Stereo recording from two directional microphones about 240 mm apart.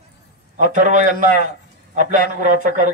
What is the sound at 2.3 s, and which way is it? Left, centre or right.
Speech, right.